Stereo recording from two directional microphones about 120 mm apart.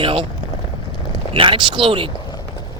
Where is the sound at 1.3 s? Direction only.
45° right (ahead or behind).